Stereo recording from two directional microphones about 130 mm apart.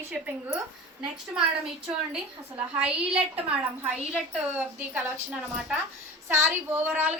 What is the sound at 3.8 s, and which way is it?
A woman's voice, 10° right (ahead or behind).